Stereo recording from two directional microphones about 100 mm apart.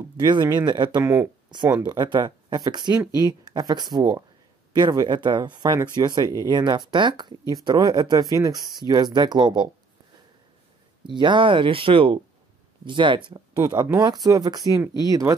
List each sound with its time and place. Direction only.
0.2 s speech: 45° right (ahead or behind)
1.0 s speech: 25° right (ahead or behind)
1.9 s speech: 45° right (ahead or behind)
11.1 s speech: 50° right (ahead or behind)
13.7 s speech: 40° right (ahead or behind)